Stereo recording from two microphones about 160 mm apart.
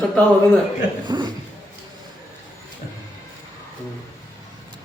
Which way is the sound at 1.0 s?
30° right (ahead or behind).